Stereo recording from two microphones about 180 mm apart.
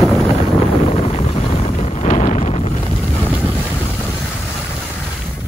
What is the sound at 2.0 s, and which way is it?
Wind noise, 40° left (ahead or behind).